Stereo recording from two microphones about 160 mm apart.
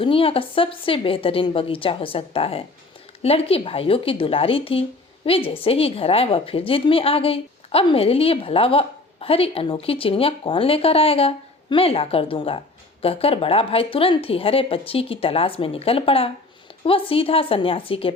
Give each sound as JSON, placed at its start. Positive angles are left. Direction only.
{"t": 0.0, "sound": "a woman's voice", "side_deg": 35}